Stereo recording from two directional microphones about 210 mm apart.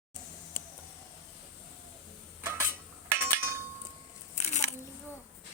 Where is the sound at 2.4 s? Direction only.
10° right (ahead or behind).